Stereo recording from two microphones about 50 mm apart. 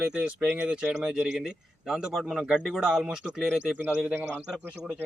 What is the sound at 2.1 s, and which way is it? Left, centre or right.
Speech, centre.